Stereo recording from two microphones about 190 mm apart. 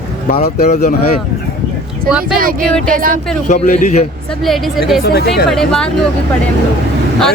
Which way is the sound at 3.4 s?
40° left (ahead or behind).